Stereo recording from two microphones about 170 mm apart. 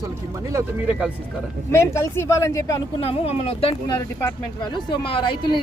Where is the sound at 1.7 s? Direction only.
15° left (ahead or behind).